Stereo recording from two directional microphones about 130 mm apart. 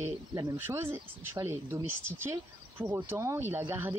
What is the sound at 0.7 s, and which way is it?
Speech, 15° right (ahead or behind).